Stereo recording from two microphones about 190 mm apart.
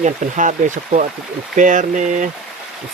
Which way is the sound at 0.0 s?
40° right (ahead or behind).